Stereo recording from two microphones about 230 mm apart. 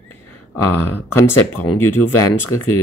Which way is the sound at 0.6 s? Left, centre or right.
Left.